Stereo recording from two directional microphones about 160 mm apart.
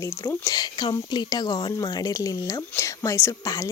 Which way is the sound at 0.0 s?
20° left (ahead or behind).